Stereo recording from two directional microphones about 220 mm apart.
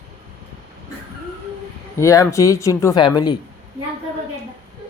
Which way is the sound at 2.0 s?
15° left (ahead or behind).